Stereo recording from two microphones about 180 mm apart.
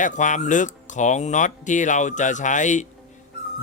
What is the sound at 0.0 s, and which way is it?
Speech, 45° left (ahead or behind).